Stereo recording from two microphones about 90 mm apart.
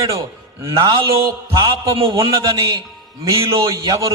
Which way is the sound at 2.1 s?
40° right (ahead or behind).